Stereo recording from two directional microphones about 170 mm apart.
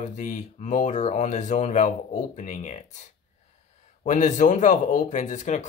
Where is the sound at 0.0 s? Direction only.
45° left (ahead or behind).